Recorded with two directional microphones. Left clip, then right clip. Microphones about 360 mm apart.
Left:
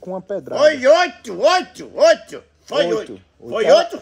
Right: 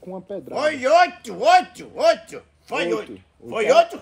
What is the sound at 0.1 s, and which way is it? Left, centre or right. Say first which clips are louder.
Speech: left 5 dB; centre.